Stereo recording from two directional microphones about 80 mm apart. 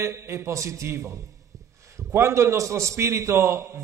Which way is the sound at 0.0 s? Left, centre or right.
Right.